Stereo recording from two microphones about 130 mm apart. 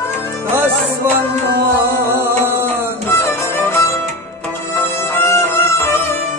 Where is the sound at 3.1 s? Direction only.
15° left (ahead or behind).